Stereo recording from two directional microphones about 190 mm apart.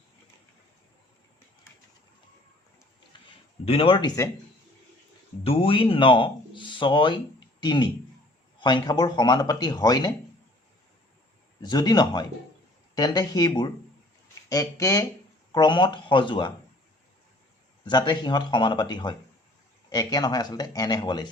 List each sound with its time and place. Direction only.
3.7 s speech: 30° left (ahead or behind)
5.4 s speech: 30° left (ahead or behind)
11.6 s speech: 20° left (ahead or behind)
17.8 s speech: 25° left (ahead or behind)